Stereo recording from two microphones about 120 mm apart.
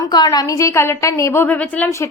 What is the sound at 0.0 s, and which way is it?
A woman's voice, 35° left (ahead or behind).